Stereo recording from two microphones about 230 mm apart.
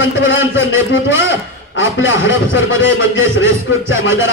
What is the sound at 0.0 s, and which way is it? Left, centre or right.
A man's voice, left.